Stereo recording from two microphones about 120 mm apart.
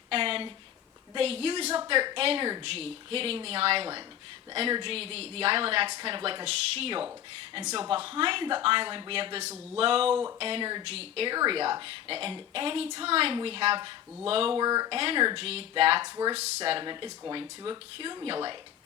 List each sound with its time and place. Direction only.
0.1 s a sound: 50° right (ahead or behind)
1.1 s a woman's voice: 55° right (ahead or behind)
14.6 s speech: 35° right (ahead or behind)
14.9 s a woman's voice: 50° right (ahead or behind)
15.4 s a woman's voice: 55° right (ahead or behind)
16.8 s speech: 40° right (ahead or behind)